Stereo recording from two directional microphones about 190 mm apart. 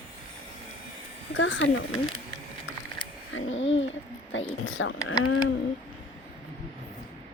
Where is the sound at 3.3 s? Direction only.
85° left.